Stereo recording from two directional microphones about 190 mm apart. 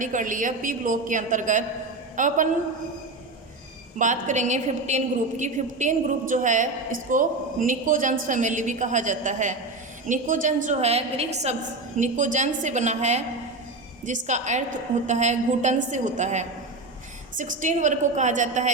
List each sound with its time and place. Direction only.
0.0 s a woman's voice: 45° right (ahead or behind)
3.9 s a woman's voice: 40° right (ahead or behind)